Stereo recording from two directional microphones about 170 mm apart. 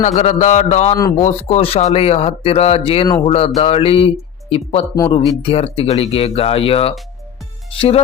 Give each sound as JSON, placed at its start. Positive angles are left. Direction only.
{"t": 0.2, "sound": "speech", "side_deg": 40}